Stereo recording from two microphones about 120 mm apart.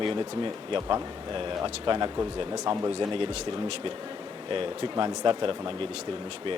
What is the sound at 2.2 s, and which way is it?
Speech, 30° right (ahead or behind).